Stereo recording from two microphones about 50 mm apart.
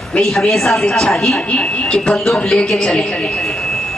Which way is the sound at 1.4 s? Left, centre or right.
Left.